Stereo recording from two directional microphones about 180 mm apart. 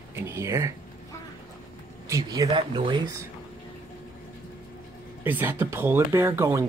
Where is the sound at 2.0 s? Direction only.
20° right (ahead or behind).